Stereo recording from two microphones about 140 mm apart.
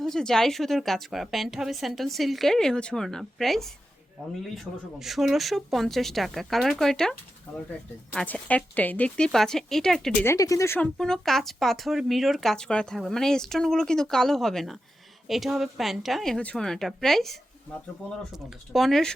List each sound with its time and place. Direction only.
0.0 s speech: 5° left (ahead or behind)
10.2 s speech: 25° left (ahead or behind)
10.8 s speech: 5° left (ahead or behind)
18.7 s speech: centre (ahead or behind)